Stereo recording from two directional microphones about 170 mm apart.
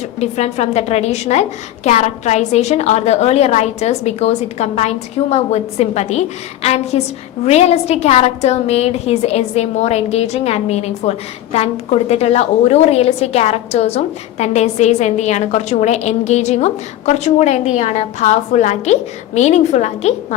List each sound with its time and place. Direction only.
0.2 s a woman's voice: 40° left (ahead or behind)